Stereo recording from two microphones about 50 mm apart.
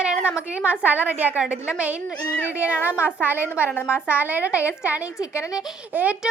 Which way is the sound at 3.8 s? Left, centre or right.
Left.